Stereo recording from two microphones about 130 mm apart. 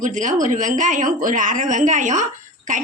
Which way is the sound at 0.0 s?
75° right (ahead or behind).